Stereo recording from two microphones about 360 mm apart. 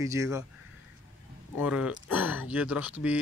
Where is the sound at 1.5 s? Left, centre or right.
Centre.